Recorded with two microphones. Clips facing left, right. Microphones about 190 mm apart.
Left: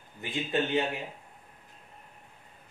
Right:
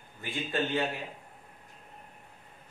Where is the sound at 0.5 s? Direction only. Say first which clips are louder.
Left 2 dB; 20° left (ahead or behind).